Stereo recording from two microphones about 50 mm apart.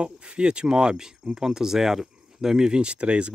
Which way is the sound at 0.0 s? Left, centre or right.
Right.